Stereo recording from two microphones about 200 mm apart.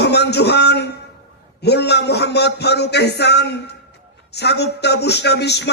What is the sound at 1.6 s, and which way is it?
Speech, 55° left (ahead or behind).